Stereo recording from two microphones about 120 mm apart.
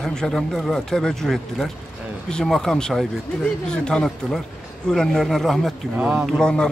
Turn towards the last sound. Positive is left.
turn(degrees=5)  # may be behind; listen again after turning